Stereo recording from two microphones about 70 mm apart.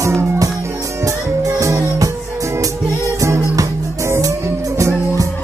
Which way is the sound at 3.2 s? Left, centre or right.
Right.